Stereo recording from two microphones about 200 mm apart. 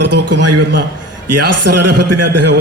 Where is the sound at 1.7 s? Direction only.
55° right (ahead or behind).